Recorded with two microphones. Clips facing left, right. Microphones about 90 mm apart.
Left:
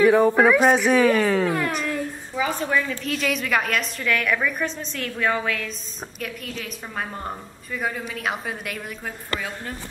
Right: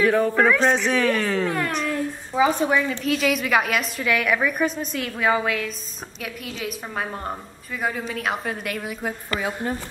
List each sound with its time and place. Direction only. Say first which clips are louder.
0.0 s a woman's voice: left 3 dB; 5° left (ahead or behind)
2.3 s a woman's voice: right 4 dB; 20° right (ahead or behind)
3.0 s a woman's voice: right 3 dB; centre (ahead or behind)
9.0 s a woman's voice: right 4 dB; 20° right (ahead or behind)